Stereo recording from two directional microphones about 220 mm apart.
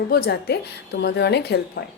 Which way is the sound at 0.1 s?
45° left (ahead or behind).